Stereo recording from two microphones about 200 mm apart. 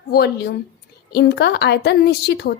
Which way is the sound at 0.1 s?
55° left (ahead or behind).